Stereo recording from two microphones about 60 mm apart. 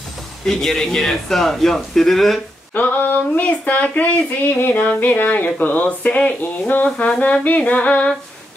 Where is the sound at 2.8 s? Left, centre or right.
Left.